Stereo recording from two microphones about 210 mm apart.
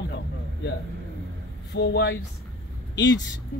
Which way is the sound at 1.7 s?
55° left (ahead or behind).